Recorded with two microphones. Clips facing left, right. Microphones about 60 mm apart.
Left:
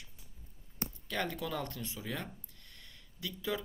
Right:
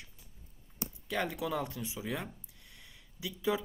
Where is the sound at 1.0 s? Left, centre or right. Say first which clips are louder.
Right 3 dB; centre.